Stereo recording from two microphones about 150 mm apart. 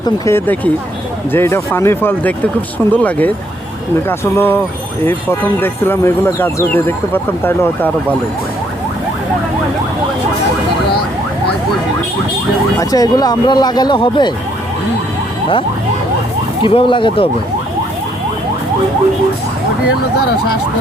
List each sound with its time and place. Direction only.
0.0 s speech: 15° left (ahead or behind)
12.8 s speech: 25° left (ahead or behind)
16.6 s speech: 35° left (ahead or behind)